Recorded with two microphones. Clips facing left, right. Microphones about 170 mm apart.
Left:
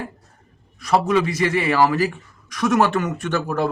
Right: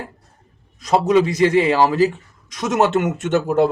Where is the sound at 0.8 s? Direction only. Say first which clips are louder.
Right 3 dB; 20° right (ahead or behind).